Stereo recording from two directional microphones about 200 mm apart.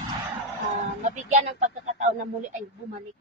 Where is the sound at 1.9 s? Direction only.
35° right (ahead or behind).